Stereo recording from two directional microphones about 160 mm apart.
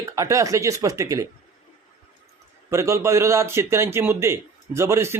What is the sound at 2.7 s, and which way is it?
A man's voice, 20° right (ahead or behind).